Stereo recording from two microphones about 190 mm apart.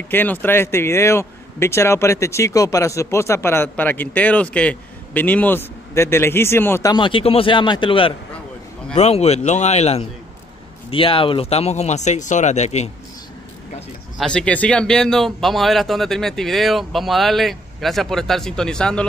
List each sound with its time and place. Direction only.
0.1 s a man's voice: 10° left (ahead or behind); by 12.9 s 35° left (ahead or behind)
14.1 s speech: 5° left (ahead or behind)